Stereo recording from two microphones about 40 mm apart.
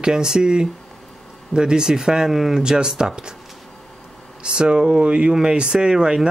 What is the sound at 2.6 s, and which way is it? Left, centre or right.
Speech, centre.